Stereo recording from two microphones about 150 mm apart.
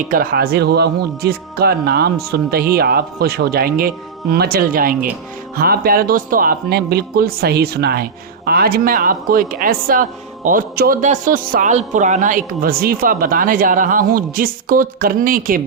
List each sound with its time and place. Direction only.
0.1 s speech: 80° right
5.5 s a man's voice: 85° right; by 15.6 s 70° right (ahead or behind)